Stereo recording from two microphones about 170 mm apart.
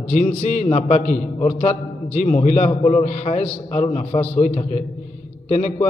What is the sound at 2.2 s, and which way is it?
A man's voice, 45° left (ahead or behind).